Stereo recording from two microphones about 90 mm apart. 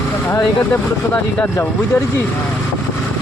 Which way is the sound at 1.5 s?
30° left (ahead or behind).